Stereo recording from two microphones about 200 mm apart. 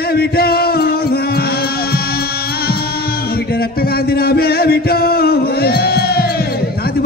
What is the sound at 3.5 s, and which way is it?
Music, 50° left (ahead or behind).